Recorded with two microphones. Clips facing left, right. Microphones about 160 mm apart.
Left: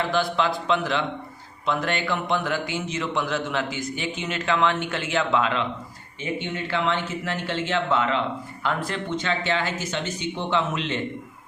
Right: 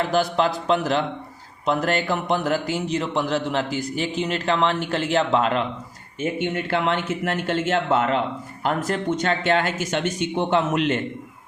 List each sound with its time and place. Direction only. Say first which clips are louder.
0.0 s a man's voice: right 3 dB; 40° right (ahead or behind)